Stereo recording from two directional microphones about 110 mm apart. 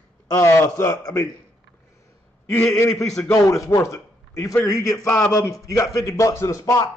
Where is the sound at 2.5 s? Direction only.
20° left (ahead or behind).